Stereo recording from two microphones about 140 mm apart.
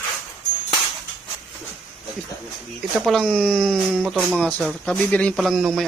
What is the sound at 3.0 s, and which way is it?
Speech, centre (ahead or behind).